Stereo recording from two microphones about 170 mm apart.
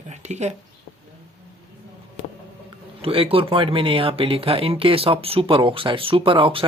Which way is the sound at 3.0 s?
35° right (ahead or behind).